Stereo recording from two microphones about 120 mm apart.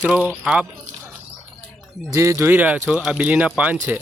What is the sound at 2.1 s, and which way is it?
Speech, 25° right (ahead or behind).